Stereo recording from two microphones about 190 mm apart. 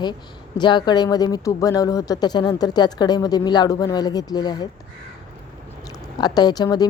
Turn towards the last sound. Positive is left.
turn(degrees=20)  # may be behind; listen again after turning